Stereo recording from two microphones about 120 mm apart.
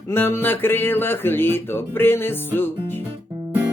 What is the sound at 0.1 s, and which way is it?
Speech, 20° left (ahead or behind).